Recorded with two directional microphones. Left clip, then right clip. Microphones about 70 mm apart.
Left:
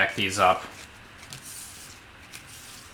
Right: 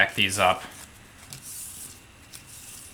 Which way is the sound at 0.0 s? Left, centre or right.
Right.